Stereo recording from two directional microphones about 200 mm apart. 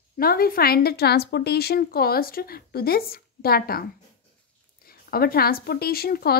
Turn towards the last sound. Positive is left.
turn(degrees=50)  # may be behind; listen again after turning